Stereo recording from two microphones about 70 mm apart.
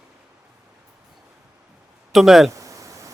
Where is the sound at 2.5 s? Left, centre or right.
Right.